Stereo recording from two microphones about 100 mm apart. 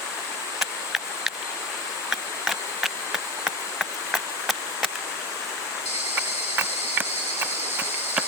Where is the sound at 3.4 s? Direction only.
5° right (ahead or behind).